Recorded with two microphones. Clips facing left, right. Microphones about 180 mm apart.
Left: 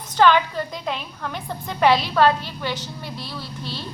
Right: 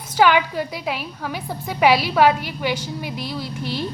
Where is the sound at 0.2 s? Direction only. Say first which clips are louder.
Even; 10° right (ahead or behind).